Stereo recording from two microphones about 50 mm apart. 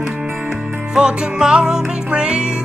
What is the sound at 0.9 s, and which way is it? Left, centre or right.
Music, centre.